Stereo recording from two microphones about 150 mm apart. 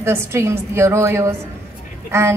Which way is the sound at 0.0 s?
15° right (ahead or behind).